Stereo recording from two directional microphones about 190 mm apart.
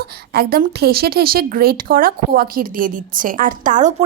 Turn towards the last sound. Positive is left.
turn(degrees=-40)  # may be behind; listen again after turning